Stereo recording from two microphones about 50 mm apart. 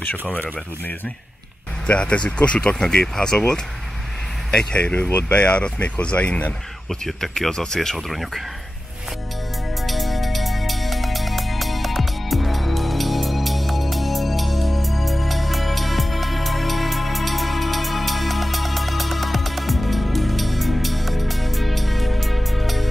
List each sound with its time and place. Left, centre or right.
0.3 s speech: left; by 3.6 s centre
4.7 s speech: left
6.9 s speech: centre
9.8 s music: centre